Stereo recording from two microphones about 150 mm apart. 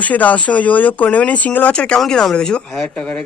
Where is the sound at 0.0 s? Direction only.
10° left (ahead or behind).